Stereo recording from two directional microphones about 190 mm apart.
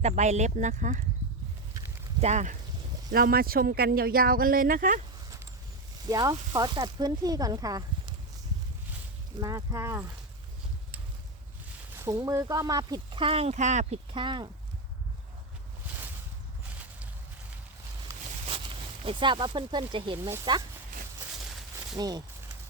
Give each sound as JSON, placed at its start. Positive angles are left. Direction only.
{"t": 0.0, "sound": "speech", "side_deg": -35}
{"t": 2.2, "sound": "speech", "side_deg": -40}
{"t": 3.1, "sound": "speech", "side_deg": -50}
{"t": 6.1, "sound": "speech", "side_deg": -20}
{"t": 9.4, "sound": "speech", "side_deg": -20}
{"t": 11.9, "sound": "speech", "side_deg": -15}
{"t": 19.0, "sound": "speech", "side_deg": -25}
{"t": 21.9, "sound": "speech", "side_deg": -20}